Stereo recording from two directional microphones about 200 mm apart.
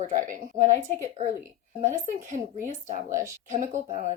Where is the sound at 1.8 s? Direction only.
40° right (ahead or behind).